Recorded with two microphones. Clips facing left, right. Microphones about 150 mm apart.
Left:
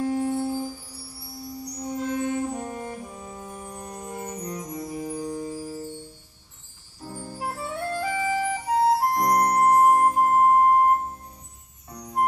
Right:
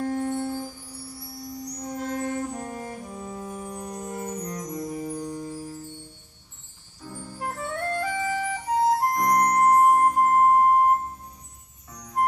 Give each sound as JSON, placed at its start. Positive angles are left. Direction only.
{"t": 0.0, "sound": "music", "side_deg": 5}
{"t": 2.0, "sound": "music", "side_deg": -40}
{"t": 2.5, "sound": "music", "side_deg": 5}
{"t": 7.0, "sound": "music", "side_deg": 40}
{"t": 7.3, "sound": "flute", "side_deg": 10}